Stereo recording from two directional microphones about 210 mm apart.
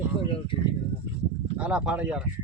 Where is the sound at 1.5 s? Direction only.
5° right (ahead or behind).